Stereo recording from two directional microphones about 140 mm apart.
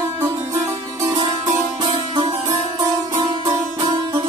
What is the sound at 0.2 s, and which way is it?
Music, 25° right (ahead or behind).